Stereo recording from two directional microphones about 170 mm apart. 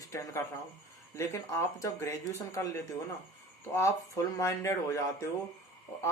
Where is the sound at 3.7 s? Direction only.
15° left (ahead or behind).